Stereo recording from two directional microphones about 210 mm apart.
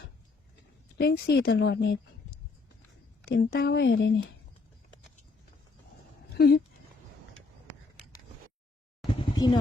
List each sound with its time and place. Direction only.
0.9 s a woman's voice: 50° left (ahead or behind)
3.2 s speech: 45° left (ahead or behind)
6.3 s speech: 50° left (ahead or behind)
9.3 s vehicle: 20° left (ahead or behind)